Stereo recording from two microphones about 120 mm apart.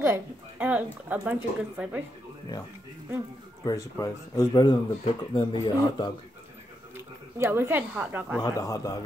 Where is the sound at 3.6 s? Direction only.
30° left (ahead or behind).